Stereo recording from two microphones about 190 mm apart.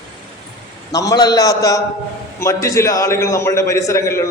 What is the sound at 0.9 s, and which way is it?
A man's voice, 20° left (ahead or behind).